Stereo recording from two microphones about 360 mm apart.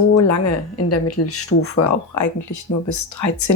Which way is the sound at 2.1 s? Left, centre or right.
Left.